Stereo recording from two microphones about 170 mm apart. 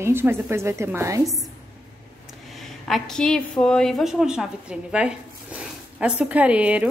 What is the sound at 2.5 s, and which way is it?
A woman's voice, centre (ahead or behind).